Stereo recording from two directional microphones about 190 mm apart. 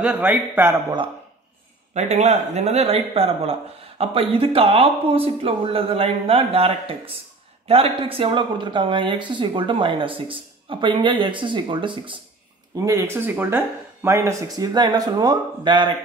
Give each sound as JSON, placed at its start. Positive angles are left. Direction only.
{"t": 0.0, "sound": "speech", "side_deg": -10}
{"t": 2.0, "sound": "speech", "side_deg": -35}
{"t": 12.7, "sound": "speech", "side_deg": -15}